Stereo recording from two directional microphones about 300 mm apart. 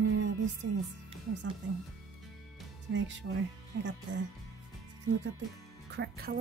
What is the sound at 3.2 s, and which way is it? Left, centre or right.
Speech, right.